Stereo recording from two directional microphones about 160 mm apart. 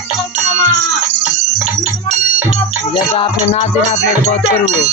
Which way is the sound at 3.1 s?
45° left (ahead or behind).